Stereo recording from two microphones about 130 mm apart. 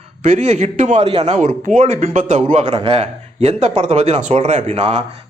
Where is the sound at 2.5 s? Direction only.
55° right (ahead or behind).